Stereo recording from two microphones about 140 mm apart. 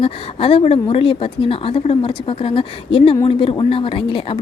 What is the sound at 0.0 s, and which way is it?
Speech, 40° left (ahead or behind).